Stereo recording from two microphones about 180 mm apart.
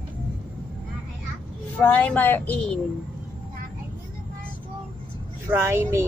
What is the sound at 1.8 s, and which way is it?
A woman's voice, 10° left (ahead or behind).